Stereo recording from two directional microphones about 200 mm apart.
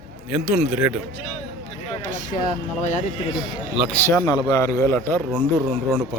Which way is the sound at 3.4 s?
Centre (ahead or behind).